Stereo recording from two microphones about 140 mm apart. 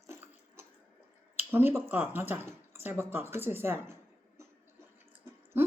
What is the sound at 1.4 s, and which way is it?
Speech, 15° right (ahead or behind).